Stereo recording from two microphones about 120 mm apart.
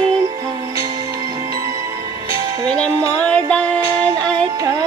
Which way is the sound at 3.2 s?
10° left (ahead or behind).